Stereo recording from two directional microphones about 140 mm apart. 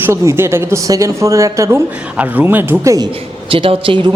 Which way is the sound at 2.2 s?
10° right (ahead or behind).